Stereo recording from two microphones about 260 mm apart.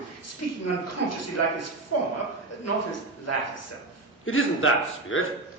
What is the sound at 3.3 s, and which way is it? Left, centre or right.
Speech, left.